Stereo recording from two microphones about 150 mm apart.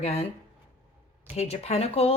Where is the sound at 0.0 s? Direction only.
45° left (ahead or behind).